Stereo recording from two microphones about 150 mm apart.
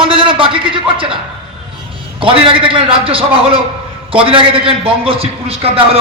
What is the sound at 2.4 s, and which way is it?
A man's voice, 35° right (ahead or behind).